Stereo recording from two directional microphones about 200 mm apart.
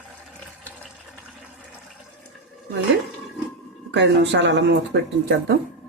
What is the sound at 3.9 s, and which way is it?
Speech, 60° right (ahead or behind).